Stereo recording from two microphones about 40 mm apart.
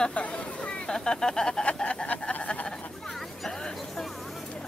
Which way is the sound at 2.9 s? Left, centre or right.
Centre.